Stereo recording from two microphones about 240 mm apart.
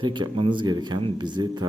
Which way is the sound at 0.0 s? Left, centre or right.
Centre.